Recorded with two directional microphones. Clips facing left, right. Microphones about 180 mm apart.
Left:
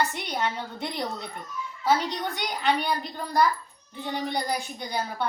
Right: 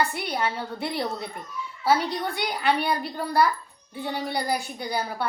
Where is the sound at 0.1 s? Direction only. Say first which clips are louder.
Right 2 dB; 5° right (ahead or behind).